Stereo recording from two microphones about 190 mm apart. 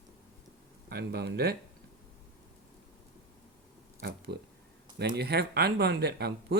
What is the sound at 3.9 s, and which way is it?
Speech, 60° right (ahead or behind).